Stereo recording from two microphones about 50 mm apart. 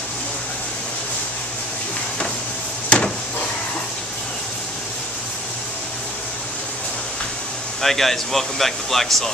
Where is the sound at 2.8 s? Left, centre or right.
Left.